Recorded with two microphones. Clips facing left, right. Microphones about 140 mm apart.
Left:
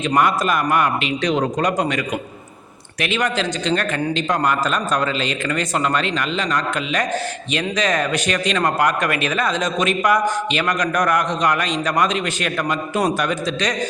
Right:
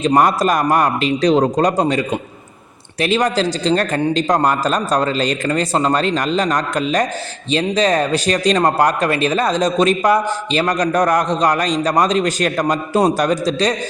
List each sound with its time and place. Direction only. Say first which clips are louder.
0.0 s speech: right 4 dB; 35° right (ahead or behind)